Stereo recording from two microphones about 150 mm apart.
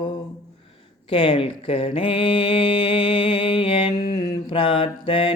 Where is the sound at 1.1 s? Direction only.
35° left (ahead or behind).